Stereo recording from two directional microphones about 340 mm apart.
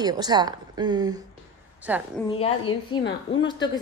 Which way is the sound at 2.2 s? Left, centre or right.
Centre.